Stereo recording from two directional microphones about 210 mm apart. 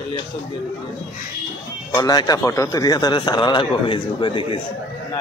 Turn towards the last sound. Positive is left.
turn(degrees=25)  # may be behind; listen again after turning